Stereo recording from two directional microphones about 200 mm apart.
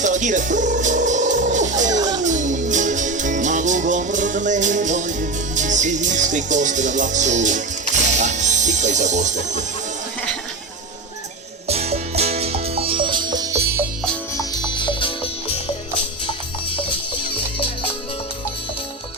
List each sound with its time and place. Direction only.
0.0 s music: 40° right (ahead or behind)
11.7 s music: 30° right (ahead or behind)
14.3 s music: 20° left (ahead or behind)